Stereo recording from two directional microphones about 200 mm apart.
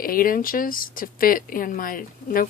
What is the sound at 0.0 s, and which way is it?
Speech, 45° left (ahead or behind).